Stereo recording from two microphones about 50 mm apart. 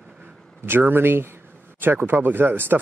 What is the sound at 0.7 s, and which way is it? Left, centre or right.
Speech, right.